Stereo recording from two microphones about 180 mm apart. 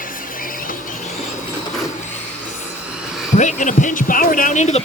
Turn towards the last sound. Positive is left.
turn(degrees=40)  # may be behind; listen again after turning